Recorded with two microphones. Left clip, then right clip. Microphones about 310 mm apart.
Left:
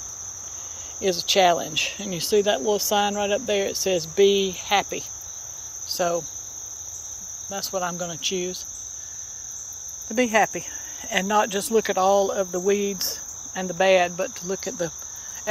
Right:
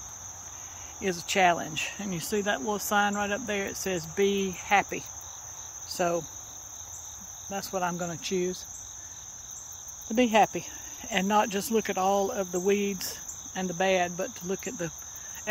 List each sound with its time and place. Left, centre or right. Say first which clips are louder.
1.0 s speech: left 5 dB; centre
5.9 s cricket: left 4 dB; centre
7.5 s speech: left 3 dB; centre
10.1 s speech: left 2 dB; centre